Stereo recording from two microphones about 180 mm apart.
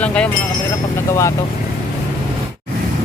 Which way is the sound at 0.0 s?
5° left (ahead or behind).